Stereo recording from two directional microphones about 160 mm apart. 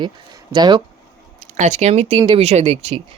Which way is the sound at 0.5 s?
25° right (ahead or behind).